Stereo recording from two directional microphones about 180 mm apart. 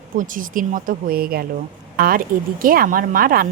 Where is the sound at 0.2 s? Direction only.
50° right (ahead or behind).